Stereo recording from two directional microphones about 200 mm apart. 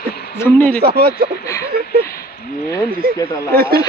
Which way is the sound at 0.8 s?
50° right (ahead or behind).